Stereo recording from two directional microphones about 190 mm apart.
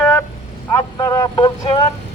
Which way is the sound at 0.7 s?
20° left (ahead or behind).